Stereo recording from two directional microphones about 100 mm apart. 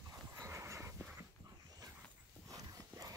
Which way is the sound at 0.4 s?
30° right (ahead or behind).